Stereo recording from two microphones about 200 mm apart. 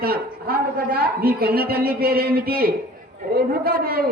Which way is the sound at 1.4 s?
50° right (ahead or behind).